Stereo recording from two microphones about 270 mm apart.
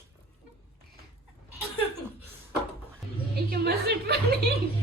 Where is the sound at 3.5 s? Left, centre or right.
Right.